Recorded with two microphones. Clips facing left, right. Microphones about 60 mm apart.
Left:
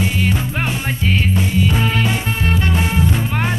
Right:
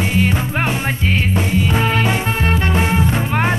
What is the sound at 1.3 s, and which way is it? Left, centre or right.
Music, right.